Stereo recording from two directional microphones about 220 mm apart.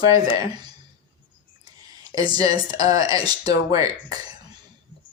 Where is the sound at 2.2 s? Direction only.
15° right (ahead or behind).